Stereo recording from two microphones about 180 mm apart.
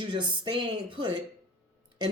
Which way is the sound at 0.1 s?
25° right (ahead or behind).